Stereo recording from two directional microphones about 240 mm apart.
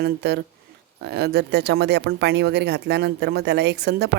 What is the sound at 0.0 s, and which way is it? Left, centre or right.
Speech, right.